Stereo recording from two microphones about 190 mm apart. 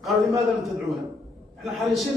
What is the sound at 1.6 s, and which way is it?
Speech, centre (ahead or behind).